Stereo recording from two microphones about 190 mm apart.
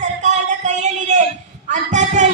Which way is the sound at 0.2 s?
40° right (ahead or behind).